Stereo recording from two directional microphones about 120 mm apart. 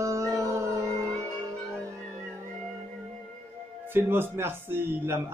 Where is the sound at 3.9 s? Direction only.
20° right (ahead or behind).